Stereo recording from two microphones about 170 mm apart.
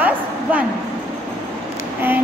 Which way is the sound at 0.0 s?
10° right (ahead or behind).